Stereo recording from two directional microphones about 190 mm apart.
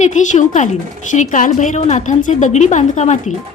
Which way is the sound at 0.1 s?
40° left (ahead or behind).